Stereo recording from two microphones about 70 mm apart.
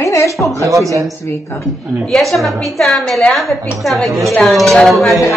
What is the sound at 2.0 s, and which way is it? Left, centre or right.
A woman's voice, centre.